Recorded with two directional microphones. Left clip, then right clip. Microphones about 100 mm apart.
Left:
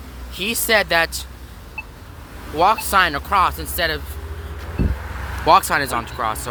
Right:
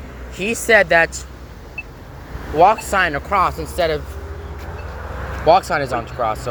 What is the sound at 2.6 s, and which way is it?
Speech, 25° left (ahead or behind).